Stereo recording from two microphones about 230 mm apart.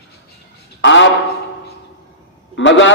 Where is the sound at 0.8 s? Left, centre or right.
Left.